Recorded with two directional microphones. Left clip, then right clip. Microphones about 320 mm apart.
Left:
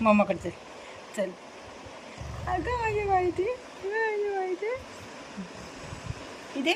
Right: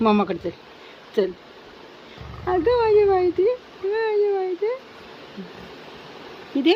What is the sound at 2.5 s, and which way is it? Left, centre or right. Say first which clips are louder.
Speech: right 11 dB; centre.